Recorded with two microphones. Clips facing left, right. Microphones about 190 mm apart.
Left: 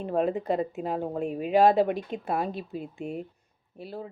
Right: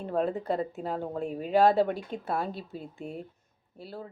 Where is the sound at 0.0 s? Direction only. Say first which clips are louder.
Left 3 dB; 15° left (ahead or behind).